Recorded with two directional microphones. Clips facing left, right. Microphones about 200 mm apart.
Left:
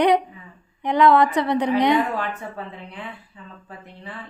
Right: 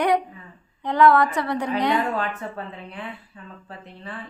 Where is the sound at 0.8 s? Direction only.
15° left (ahead or behind).